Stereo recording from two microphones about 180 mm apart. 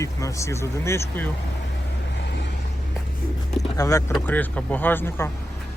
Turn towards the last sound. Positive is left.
turn(degrees=10)  # may be behind; listen again after turning